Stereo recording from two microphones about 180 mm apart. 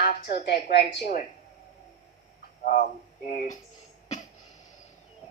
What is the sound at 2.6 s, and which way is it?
Speech, 45° left (ahead or behind).